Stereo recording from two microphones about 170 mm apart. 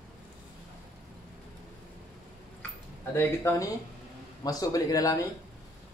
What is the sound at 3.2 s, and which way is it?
A man's voice, 15° left (ahead or behind).